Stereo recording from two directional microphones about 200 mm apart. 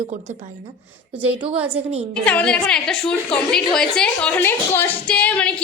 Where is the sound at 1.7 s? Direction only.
30° right (ahead or behind).